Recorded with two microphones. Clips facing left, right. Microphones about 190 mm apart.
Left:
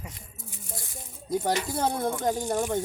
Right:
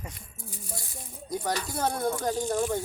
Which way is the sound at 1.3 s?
25° left (ahead or behind).